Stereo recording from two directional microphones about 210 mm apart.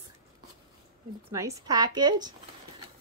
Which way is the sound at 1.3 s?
15° right (ahead or behind).